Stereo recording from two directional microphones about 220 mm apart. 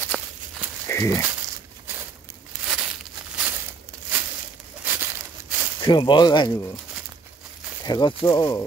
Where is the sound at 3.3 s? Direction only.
10° right (ahead or behind).